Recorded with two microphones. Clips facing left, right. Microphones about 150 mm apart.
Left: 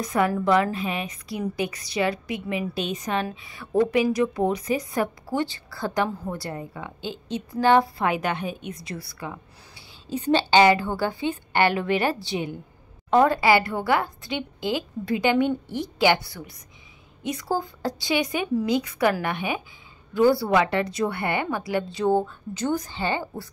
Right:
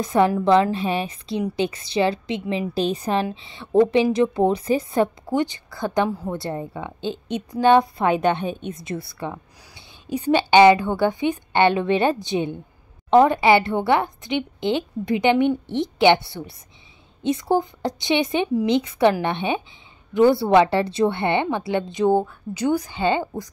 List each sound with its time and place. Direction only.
0.0 s a woman's voice: 30° right (ahead or behind)
2.7 s a woman's voice: 35° right (ahead or behind); by 6.3 s 10° right (ahead or behind)
6.3 s a woman's voice: 25° right (ahead or behind)